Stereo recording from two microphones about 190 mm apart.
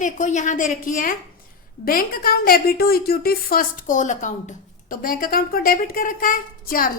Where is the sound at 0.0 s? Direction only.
40° left (ahead or behind).